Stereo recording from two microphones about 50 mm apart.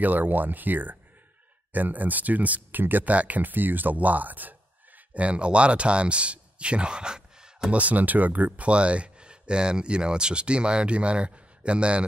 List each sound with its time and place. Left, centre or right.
0.0 s speech: right; by 7.7 s centre
7.7 s speech: right
8.6 s speech: right